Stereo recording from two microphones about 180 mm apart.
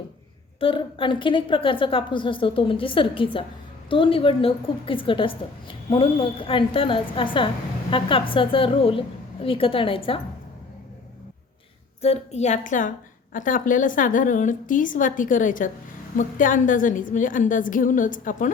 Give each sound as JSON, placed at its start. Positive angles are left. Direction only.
{"t": 0.6, "sound": "a woman's voice", "side_deg": 30}
{"t": 12.0, "sound": "a woman's voice", "side_deg": 35}